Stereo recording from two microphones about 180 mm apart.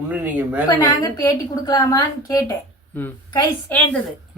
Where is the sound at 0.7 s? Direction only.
20° left (ahead or behind).